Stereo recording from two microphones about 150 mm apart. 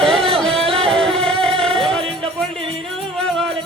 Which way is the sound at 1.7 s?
5° left (ahead or behind).